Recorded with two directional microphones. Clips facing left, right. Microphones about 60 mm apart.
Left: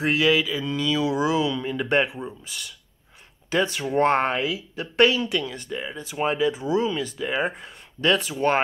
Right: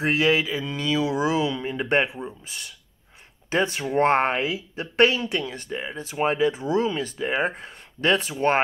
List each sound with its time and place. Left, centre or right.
0.0 s speech: right